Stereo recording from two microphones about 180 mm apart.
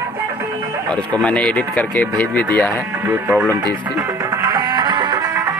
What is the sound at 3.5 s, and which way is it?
Music, 20° right (ahead or behind).